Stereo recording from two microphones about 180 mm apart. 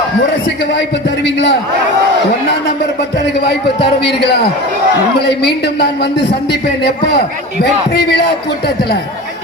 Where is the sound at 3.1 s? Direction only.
65° left (ahead or behind).